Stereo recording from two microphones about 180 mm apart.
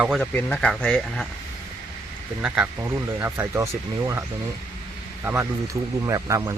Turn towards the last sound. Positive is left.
turn(degrees=-15)  # may be behind; listen again after turning